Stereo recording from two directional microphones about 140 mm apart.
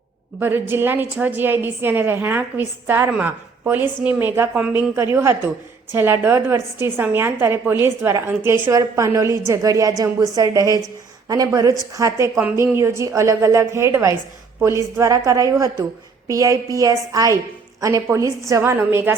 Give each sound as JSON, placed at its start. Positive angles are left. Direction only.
{"t": 0.3, "sound": "a woman's voice", "side_deg": -15}